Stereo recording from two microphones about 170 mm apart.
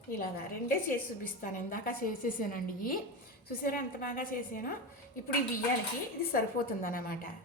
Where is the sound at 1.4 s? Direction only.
55° left (ahead or behind).